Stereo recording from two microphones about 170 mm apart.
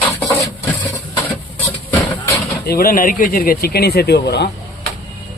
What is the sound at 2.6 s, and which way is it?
Speech, 60° left (ahead or behind).